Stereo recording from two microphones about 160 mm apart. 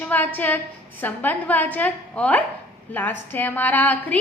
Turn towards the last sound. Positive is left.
turn(degrees=10)  # may be behind; listen again after turning